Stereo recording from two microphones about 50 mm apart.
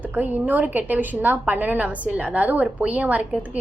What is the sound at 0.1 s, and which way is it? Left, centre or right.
A woman's voice, right.